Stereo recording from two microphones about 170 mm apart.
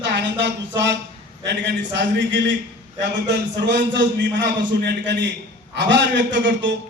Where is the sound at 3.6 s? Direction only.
90° right.